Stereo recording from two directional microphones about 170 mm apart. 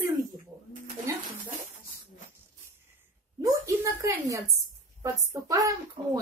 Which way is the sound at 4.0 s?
20° right (ahead or behind).